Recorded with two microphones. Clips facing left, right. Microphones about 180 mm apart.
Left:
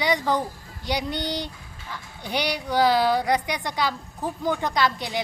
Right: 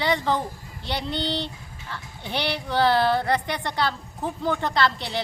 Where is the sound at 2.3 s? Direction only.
15° left (ahead or behind).